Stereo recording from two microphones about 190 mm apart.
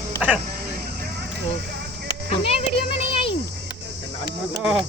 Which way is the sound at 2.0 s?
30° left (ahead or behind).